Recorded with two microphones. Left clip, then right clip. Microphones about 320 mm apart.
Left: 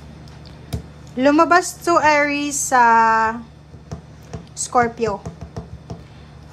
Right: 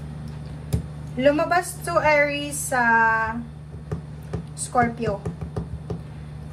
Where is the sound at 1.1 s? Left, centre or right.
Centre.